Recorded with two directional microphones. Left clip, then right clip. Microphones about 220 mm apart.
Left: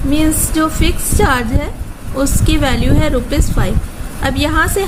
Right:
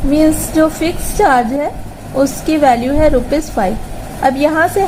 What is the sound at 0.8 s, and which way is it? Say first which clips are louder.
Speech: right 3 dB; 20° left (ahead or behind).